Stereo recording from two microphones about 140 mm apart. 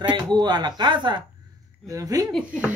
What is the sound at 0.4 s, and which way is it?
Speech, 30° right (ahead or behind).